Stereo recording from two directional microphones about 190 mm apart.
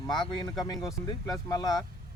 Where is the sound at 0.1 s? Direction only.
20° left (ahead or behind).